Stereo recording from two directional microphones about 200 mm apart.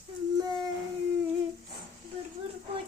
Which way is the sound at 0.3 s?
20° right (ahead or behind).